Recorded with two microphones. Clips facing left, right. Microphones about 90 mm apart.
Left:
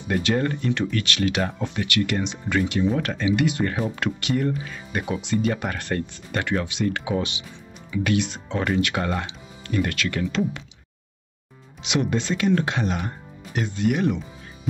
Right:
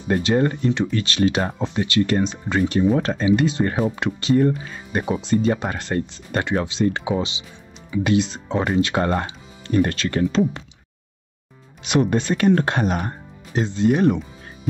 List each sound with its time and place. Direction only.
0.1 s speech: 25° right (ahead or behind)
11.8 s speech: 45° right (ahead or behind)
13.5 s speech: 30° right (ahead or behind)